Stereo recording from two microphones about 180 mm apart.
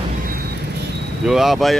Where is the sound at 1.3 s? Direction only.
Centre (ahead or behind).